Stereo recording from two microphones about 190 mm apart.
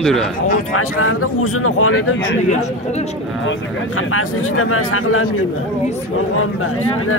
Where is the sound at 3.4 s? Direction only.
90° left.